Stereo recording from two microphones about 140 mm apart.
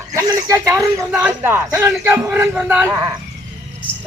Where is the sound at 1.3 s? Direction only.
20° right (ahead or behind).